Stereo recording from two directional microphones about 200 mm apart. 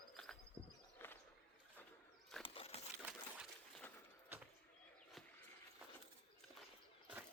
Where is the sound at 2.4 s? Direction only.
30° left (ahead or behind).